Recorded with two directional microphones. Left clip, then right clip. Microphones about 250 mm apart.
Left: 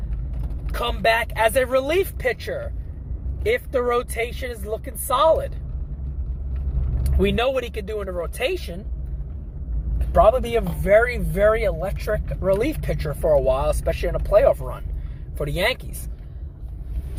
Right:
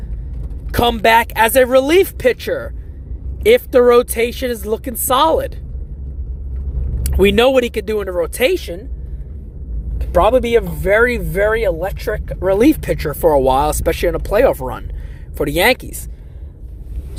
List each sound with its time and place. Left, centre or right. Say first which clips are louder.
0.7 s speech: right 9 dB; right
7.0 s speech: right 9 dB; right
10.1 s speech: right 4 dB; right